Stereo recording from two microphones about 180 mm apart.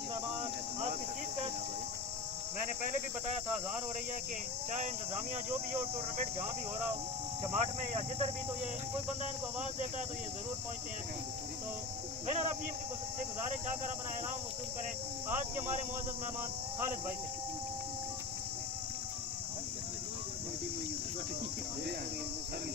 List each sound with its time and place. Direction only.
0.4 s cricket: 35° right (ahead or behind)
2.8 s a man's voice: 45° right (ahead or behind)
5.7 s speech: 35° right (ahead or behind)
7.5 s speech: 35° right (ahead or behind)